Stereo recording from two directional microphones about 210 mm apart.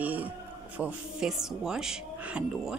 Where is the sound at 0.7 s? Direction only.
5° right (ahead or behind).